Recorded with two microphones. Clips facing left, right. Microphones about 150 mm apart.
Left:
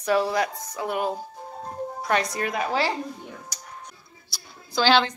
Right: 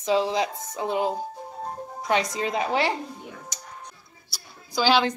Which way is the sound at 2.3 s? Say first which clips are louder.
Right 1 dB; 20° right (ahead or behind).